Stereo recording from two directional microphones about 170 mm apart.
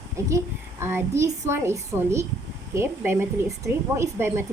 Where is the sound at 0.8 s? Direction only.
15° right (ahead or behind).